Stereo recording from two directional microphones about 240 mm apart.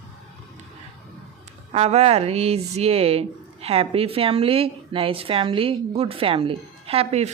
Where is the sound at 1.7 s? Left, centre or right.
Right.